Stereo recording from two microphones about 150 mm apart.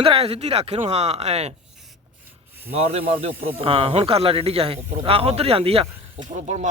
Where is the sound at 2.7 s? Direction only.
45° right (ahead or behind).